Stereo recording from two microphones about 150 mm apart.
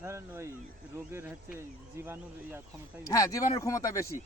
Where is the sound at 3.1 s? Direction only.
20° left (ahead or behind).